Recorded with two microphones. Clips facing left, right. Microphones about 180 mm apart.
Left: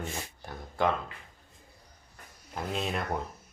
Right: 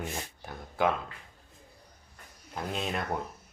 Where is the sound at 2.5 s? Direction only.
Centre (ahead or behind).